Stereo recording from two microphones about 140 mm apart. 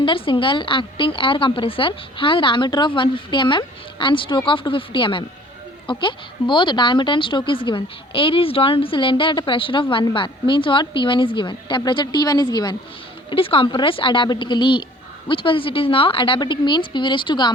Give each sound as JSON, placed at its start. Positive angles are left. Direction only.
{"t": 0.0, "sound": "a woman's voice", "side_deg": 40}